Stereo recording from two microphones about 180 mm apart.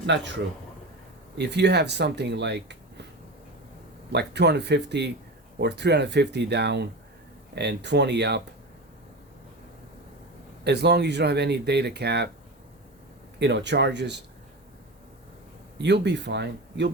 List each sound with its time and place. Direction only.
0.0 s speech: 80° right
1.4 s speech: 70° right (ahead or behind)
4.1 s speech: 70° right (ahead or behind)
10.6 s speech: 70° right (ahead or behind)
13.4 s speech: 70° right (ahead or behind)
15.8 s speech: 70° right (ahead or behind)